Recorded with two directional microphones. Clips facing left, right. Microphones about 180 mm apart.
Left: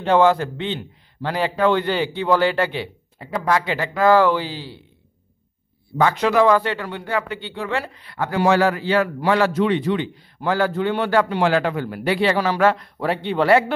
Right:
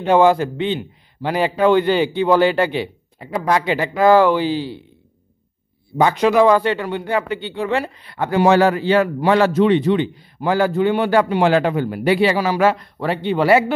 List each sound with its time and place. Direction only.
0.0 s a man's voice: 10° right (ahead or behind)
5.9 s a man's voice: 15° right (ahead or behind)